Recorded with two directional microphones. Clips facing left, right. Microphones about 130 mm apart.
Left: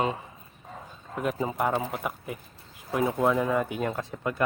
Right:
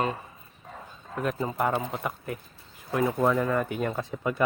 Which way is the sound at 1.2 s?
10° left (ahead or behind).